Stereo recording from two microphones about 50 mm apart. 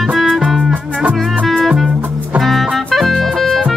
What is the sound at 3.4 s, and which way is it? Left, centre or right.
Music, centre.